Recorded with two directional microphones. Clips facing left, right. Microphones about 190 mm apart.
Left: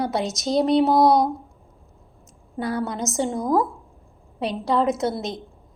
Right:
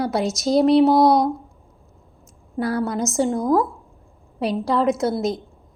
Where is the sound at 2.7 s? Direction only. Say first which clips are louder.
Right 4 dB; 5° right (ahead or behind).